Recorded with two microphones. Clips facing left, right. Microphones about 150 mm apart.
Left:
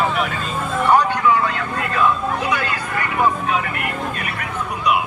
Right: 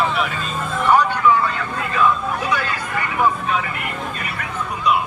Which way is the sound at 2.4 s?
10° left (ahead or behind).